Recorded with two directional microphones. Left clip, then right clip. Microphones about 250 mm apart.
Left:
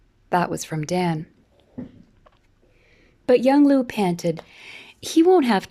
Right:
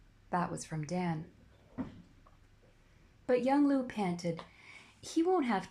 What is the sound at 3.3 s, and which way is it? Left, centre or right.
Speech, left.